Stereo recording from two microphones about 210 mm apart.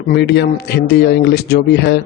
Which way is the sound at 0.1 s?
50° left (ahead or behind).